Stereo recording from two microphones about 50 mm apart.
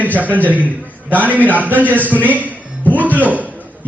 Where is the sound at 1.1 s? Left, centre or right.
Right.